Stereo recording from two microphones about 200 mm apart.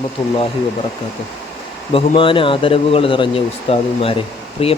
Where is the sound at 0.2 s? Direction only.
30° left (ahead or behind).